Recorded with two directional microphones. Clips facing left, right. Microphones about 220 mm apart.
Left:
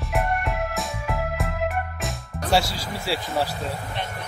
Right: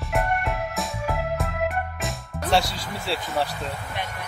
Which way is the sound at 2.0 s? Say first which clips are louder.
Even; centre (ahead or behind).